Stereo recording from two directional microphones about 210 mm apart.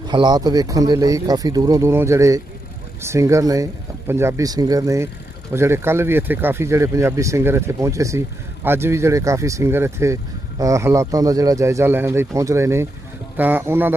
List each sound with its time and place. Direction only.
0.1 s speech: 20° right (ahead or behind)